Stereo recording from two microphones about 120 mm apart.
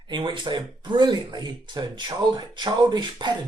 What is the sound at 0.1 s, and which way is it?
Speech, 40° right (ahead or behind).